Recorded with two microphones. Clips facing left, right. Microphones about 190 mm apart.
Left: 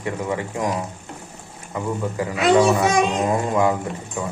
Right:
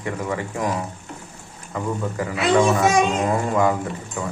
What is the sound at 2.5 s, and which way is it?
Speech, 35° left (ahead or behind).